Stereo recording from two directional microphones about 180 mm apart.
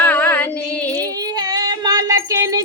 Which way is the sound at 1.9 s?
20° right (ahead or behind).